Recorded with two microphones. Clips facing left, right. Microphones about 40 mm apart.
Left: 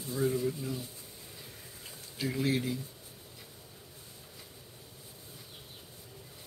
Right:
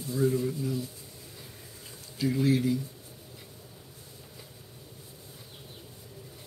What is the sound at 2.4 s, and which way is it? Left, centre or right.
Speech, left.